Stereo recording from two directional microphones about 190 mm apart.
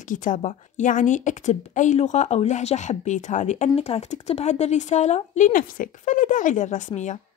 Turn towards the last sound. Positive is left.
turn(degrees=40)  # may be behind; listen again after turning